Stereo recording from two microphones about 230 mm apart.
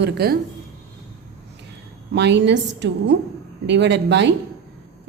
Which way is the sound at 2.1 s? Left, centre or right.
Right.